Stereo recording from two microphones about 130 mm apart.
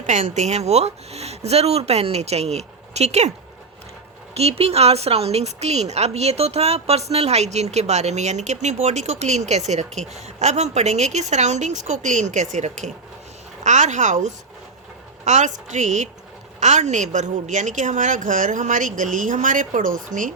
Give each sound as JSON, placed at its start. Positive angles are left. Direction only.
{"t": 0.0, "sound": "a woman's voice", "side_deg": -65}
{"t": 4.4, "sound": "a woman's voice", "side_deg": -50}